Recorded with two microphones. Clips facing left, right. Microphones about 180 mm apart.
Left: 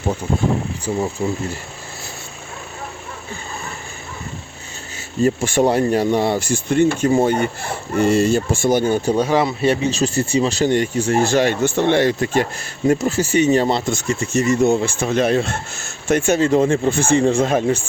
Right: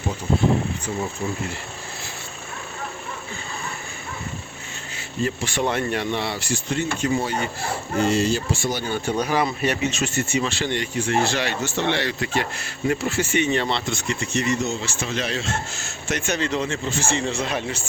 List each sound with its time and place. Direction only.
0.9 s speech: 25° left (ahead or behind)
5.2 s speech: 45° left (ahead or behind)
9.1 s speech: 25° left (ahead or behind); by 17.7 s 45° left (ahead or behind)